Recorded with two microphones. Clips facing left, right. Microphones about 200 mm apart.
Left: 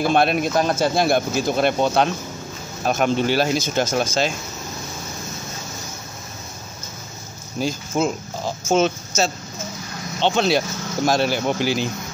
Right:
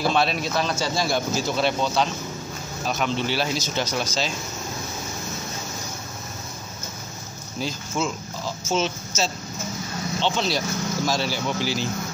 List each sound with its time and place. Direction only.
0.0 s speech: 55° left (ahead or behind)
7.6 s speech: 50° left (ahead or behind)